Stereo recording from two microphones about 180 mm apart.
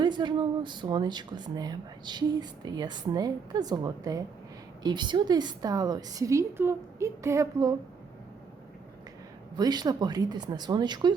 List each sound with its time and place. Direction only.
0.0 s speech: 25° right (ahead or behind)
9.6 s speech: 20° right (ahead or behind)